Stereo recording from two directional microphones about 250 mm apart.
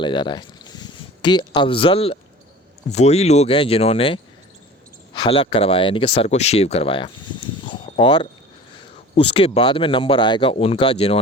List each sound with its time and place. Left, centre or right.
0.0 s speech: centre